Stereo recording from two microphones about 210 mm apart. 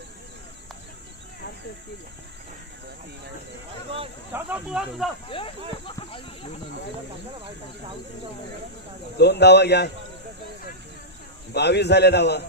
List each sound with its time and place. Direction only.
4.3 s speech: 10° right (ahead or behind)
5.3 s speech: 25° left (ahead or behind)
5.8 s a sound: 25° left (ahead or behind)
9.1 s a man's voice: 55° left (ahead or behind)
11.5 s a man's voice: 55° left (ahead or behind)